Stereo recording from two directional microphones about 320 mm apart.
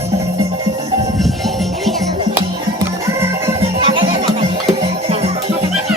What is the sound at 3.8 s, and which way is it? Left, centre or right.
Music, centre.